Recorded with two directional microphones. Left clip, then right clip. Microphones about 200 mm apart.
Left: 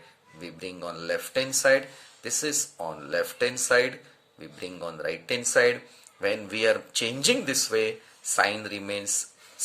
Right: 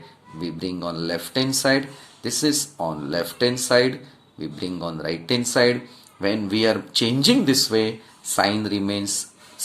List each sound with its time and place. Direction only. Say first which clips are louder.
0.3 s speech: right 8 dB; 20° left (ahead or behind)